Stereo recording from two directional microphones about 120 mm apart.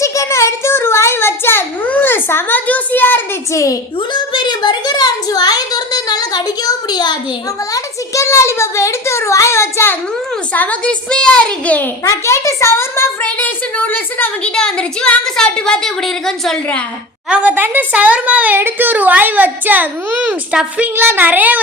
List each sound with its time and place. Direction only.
0.0 s a sound: 25° left (ahead or behind)
3.5 s a child's voice: 25° left (ahead or behind)
4.1 s a sound: 40° left (ahead or behind)
7.7 s a child's voice: 25° left (ahead or behind)
12.0 s a child's voice: 25° left (ahead or behind); by 16.6 s centre (ahead or behind)
17.2 s a woman's voice: 10° right (ahead or behind)